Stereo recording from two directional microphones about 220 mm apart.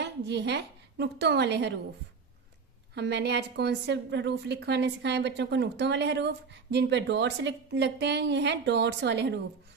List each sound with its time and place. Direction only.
0.0 s a woman's voice: 50° right (ahead or behind)
2.9 s a woman's voice: 50° right (ahead or behind)